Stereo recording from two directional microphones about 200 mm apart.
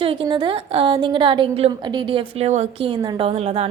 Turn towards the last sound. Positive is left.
turn(degrees=-30)  # may be behind; listen again after turning